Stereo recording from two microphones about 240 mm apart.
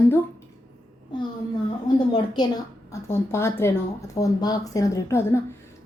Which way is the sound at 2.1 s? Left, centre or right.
Centre.